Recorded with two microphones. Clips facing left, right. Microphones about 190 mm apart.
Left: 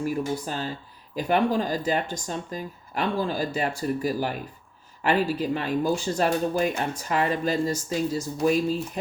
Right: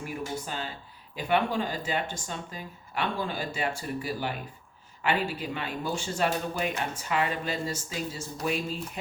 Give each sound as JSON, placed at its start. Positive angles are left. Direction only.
{"t": 0.0, "sound": "speech", "side_deg": 40}